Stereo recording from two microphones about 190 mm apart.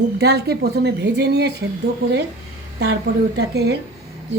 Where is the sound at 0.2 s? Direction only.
60° right (ahead or behind).